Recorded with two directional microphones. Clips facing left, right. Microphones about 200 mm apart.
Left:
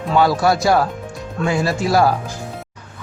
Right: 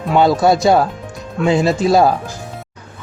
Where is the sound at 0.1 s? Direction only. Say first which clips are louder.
Right 3 dB; 20° right (ahead or behind).